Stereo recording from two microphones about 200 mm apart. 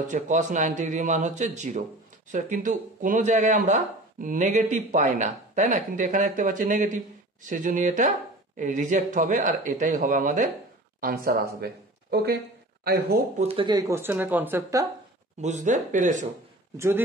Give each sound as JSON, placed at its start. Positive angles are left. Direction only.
{"t": 0.1, "sound": "speech", "side_deg": -40}
{"t": 13.4, "sound": "speech", "side_deg": -25}
{"t": 15.4, "sound": "speech", "side_deg": -35}
{"t": 16.7, "sound": "speech", "side_deg": -15}